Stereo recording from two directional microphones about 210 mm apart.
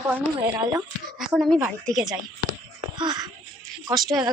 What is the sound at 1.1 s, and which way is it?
Speech, centre (ahead or behind).